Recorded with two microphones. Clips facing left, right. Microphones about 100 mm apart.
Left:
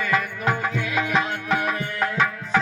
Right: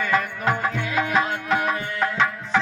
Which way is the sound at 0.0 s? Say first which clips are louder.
Right 1 dB; 5° left (ahead or behind).